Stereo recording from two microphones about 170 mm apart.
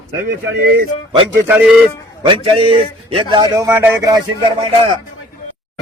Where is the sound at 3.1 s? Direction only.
25° right (ahead or behind).